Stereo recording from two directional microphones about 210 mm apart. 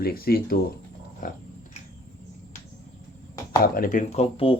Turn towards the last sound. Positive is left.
turn(degrees=25)  # may be behind; listen again after turning